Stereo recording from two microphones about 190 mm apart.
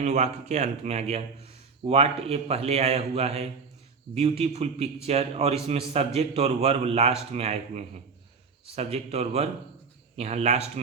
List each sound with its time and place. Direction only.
0.0 s speech: 35° right (ahead or behind)